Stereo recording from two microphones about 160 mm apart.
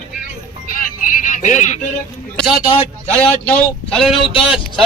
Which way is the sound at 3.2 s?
5° left (ahead or behind).